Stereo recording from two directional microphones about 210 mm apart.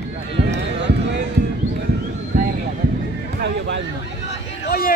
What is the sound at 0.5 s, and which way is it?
Run, 55° right (ahead or behind).